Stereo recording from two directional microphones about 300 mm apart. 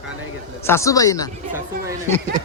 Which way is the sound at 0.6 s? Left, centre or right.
Centre.